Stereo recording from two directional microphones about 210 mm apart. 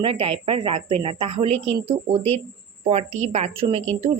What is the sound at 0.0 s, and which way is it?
A woman's voice, 25° right (ahead or behind).